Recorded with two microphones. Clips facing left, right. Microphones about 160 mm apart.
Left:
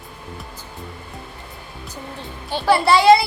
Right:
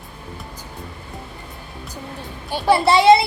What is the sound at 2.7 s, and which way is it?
Speech, 25° right (ahead or behind).